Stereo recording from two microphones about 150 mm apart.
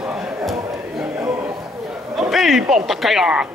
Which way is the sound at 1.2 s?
20° right (ahead or behind).